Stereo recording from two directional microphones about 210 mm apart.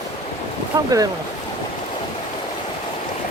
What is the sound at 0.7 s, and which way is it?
Speech, 20° right (ahead or behind).